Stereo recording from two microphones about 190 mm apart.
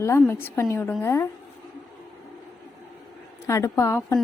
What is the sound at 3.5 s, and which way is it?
Speech, 15° left (ahead or behind).